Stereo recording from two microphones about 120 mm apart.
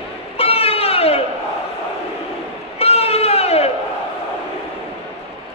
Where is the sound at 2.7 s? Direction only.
55° left (ahead or behind).